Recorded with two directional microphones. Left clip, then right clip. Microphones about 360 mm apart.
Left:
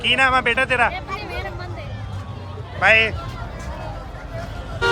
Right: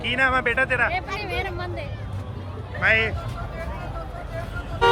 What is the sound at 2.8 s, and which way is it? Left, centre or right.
Speech, centre.